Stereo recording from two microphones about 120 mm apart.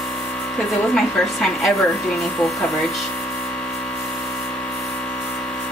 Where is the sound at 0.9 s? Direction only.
5° left (ahead or behind).